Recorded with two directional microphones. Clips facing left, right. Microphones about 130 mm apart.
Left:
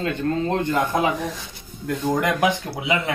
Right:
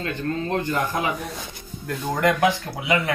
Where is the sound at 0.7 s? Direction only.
20° left (ahead or behind).